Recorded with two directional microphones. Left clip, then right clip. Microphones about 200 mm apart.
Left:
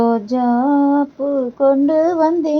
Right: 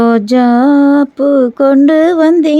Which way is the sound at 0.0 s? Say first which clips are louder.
Right 7 dB; 40° right (ahead or behind).